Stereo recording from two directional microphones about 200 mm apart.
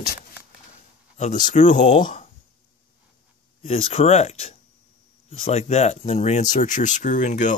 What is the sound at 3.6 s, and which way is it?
Speech, 30° left (ahead or behind).